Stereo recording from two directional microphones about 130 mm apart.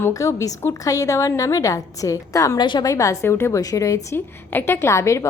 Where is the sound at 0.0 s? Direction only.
25° left (ahead or behind).